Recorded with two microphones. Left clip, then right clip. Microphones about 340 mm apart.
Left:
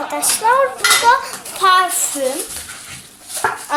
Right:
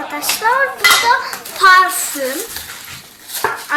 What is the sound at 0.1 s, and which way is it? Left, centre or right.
A child's voice, centre.